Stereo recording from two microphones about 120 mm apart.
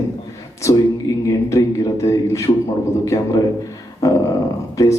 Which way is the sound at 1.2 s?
25° left (ahead or behind).